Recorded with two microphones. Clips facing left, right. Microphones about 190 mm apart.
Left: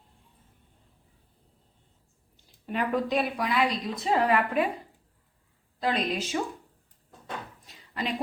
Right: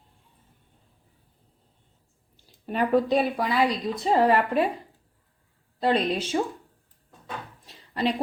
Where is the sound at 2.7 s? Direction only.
35° right (ahead or behind).